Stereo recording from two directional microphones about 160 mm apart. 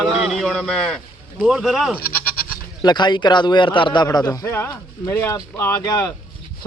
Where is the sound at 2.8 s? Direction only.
25° left (ahead or behind).